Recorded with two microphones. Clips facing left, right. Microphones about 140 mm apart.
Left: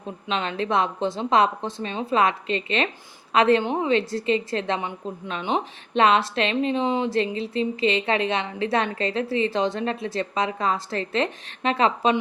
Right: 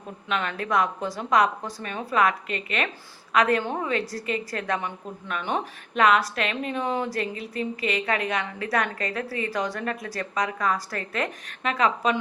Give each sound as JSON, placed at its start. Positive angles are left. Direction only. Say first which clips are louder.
{"t": 0.3, "sound": "a woman's voice", "louder": "left 2 dB", "side_deg": 25}